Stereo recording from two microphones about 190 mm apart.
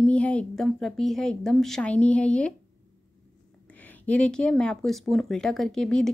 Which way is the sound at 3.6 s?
10° left (ahead or behind).